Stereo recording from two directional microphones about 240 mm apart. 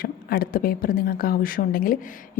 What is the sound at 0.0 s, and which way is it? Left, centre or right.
A woman's voice, left.